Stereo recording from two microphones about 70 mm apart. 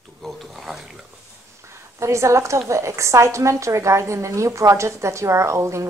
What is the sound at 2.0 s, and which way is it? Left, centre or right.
A woman's voice, right.